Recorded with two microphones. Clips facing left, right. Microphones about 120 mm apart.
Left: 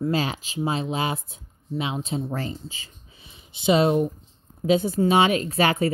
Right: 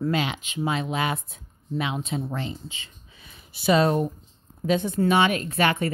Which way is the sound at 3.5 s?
25° left (ahead or behind).